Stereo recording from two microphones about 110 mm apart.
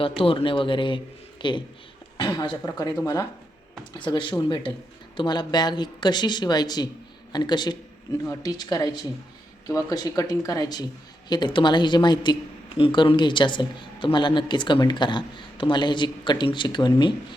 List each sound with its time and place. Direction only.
0.2 s a woman's voice: 55° left (ahead or behind); by 3.2 s 30° left (ahead or behind)
3.9 s a woman's voice: 45° left (ahead or behind)